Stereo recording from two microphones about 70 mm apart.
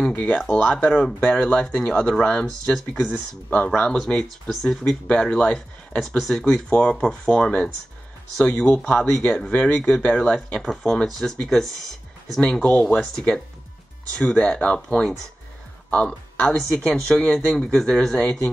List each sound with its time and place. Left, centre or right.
0.1 s speech: left
5.9 s speech: centre
6.4 s speech: centre
10.6 s speech: centre
12.9 s speech: centre